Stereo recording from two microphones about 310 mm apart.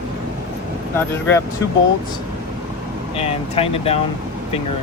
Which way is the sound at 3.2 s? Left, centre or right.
Centre.